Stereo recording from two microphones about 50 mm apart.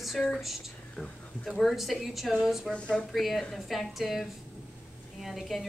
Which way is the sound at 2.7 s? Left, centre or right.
Centre.